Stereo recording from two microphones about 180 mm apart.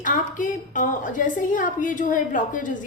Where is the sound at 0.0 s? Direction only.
45° left (ahead or behind).